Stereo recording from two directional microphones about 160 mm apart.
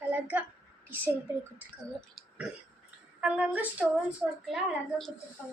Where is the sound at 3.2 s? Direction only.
5° right (ahead or behind).